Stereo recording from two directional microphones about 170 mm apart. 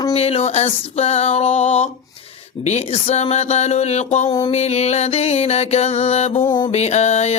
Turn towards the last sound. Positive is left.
turn(degrees=40)  # may be behind; listen again after turning